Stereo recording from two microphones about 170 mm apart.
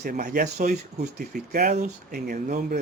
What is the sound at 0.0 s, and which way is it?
Speech, 55° right (ahead or behind).